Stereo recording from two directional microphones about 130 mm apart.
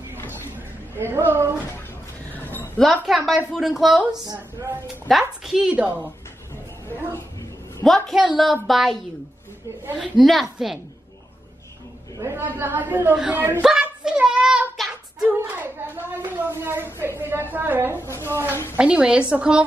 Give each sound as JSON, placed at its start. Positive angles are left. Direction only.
{"t": 0.9, "sound": "a woman's voice", "side_deg": -20}
{"t": 2.3, "sound": "a sound", "side_deg": 15}
{"t": 2.8, "sound": "a woman's voice", "side_deg": 0}
{"t": 7.8, "sound": "a woman's voice", "side_deg": 0}
{"t": 12.2, "sound": "speech", "side_deg": -20}
{"t": 13.7, "sound": "child singing", "side_deg": -5}
{"t": 15.4, "sound": "speech", "side_deg": -15}
{"t": 18.0, "sound": "a woman's voice", "side_deg": 20}
{"t": 18.8, "sound": "speech", "side_deg": -10}